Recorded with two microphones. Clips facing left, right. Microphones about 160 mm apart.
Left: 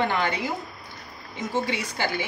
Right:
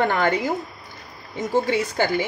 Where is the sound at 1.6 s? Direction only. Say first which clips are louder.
Right 7 dB; 50° right (ahead or behind).